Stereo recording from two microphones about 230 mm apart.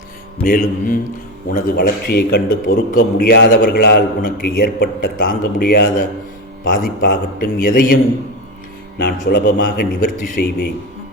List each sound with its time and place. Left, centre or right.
0.4 s a man's voice: left
9.0 s a man's voice: left